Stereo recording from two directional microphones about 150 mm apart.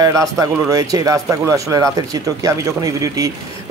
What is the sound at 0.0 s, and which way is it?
Speech, 20° right (ahead or behind).